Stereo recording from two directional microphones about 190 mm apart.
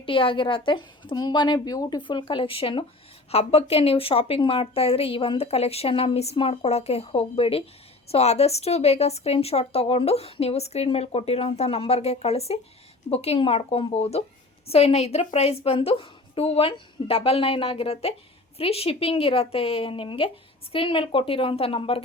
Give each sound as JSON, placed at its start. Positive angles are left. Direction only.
{"t": 0.0, "sound": "a woman's voice", "side_deg": 30}